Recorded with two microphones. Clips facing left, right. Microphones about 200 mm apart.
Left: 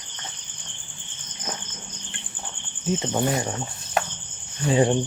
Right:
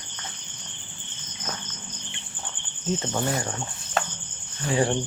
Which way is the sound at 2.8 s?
15° left (ahead or behind).